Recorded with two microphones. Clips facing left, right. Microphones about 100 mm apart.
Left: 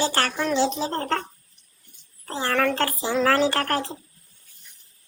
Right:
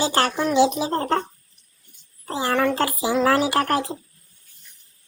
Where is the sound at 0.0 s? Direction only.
20° right (ahead or behind).